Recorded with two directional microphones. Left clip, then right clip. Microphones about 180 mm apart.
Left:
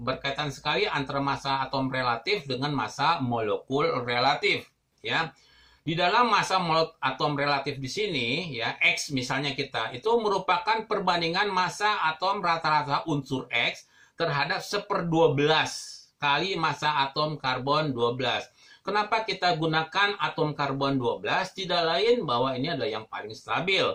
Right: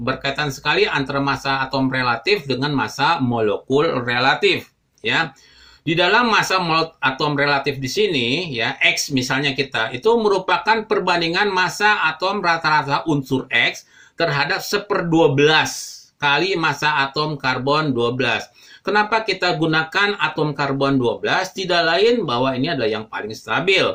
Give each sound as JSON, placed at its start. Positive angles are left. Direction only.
{"t": 0.0, "sound": "speech", "side_deg": -20}
{"t": 5.9, "sound": "speech", "side_deg": -20}